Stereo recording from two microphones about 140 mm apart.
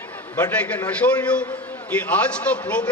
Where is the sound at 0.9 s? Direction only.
10° left (ahead or behind).